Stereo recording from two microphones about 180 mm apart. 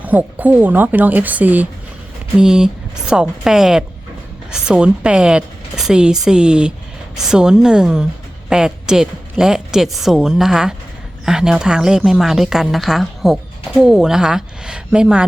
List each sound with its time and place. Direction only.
0.0 s speech: 10° right (ahead or behind)